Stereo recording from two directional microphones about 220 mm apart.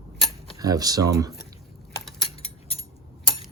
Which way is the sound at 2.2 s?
25° left (ahead or behind).